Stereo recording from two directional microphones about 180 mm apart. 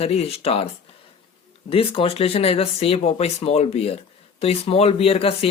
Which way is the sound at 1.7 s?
30° left (ahead or behind).